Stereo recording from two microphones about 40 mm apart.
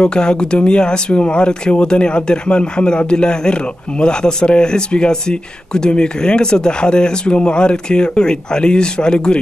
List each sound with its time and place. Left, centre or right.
0.0 s speech: left